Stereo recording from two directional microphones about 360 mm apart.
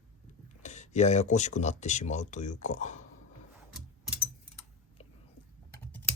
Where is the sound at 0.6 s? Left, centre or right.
Centre.